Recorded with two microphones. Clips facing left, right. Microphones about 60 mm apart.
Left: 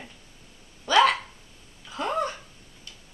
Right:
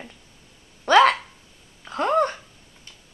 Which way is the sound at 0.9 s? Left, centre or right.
Right.